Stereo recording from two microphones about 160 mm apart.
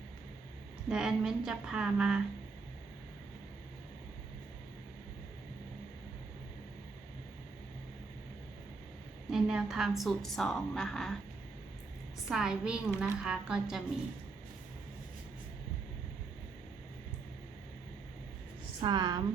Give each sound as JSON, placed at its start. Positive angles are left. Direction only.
{"t": 0.9, "sound": "a woman's voice", "side_deg": -5}
{"t": 9.3, "sound": "a woman's voice", "side_deg": -5}
{"t": 12.3, "sound": "a woman's voice", "side_deg": -5}
{"t": 18.8, "sound": "a woman's voice", "side_deg": -30}